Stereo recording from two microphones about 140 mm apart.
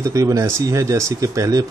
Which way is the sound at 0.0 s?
25° right (ahead or behind).